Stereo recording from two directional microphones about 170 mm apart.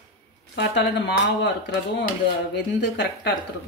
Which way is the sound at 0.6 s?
90° left.